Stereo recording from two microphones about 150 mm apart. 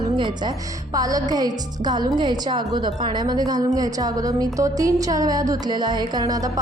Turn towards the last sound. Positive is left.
turn(degrees=-25)  # may be behind; listen again after turning